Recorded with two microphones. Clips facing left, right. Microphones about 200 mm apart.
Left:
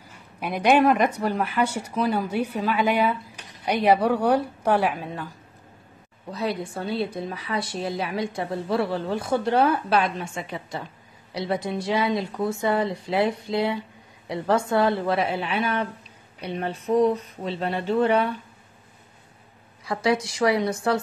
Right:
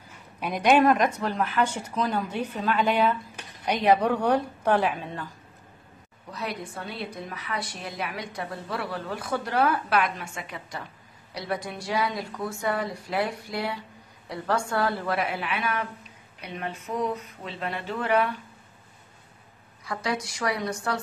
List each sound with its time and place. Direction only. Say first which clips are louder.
0.4 s speech: left 1 dB; 10° left (ahead or behind)
6.3 s a woman's voice: left 6 dB; 30° left (ahead or behind)
19.8 s a woman's voice: left 7 dB; 25° left (ahead or behind)